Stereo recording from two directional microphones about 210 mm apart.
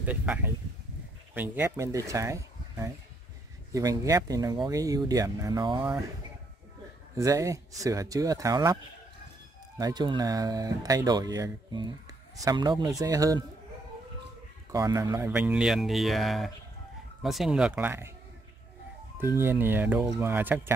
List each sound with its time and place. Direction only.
0.0 s speech: 5° right (ahead or behind)
7.2 s speech: 15° right (ahead or behind)
9.8 s speech: 20° right (ahead or behind)
14.7 s speech: 15° right (ahead or behind)
19.2 s speech: 10° right (ahead or behind)